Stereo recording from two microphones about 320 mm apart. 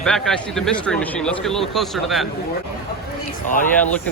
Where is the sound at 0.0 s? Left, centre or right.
Centre.